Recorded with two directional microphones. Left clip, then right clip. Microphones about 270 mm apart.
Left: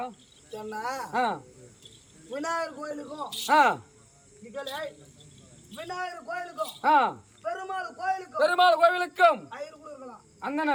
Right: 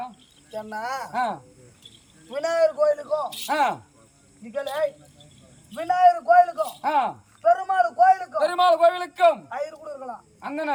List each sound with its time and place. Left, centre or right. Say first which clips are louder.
0.5 s speech: right 3 dB; centre
1.1 s a man's voice: even; centre
2.3 s a man's voice: right 9 dB; centre
3.5 s a man's voice: left 2 dB; centre
4.5 s a man's voice: right 9 dB; centre
6.8 s a man's voice: left 2 dB; centre
7.4 s a man's voice: right 13 dB; centre
8.4 s a man's voice: right 2 dB; centre
9.5 s a man's voice: right 8 dB; centre
10.4 s a man's voice: even; centre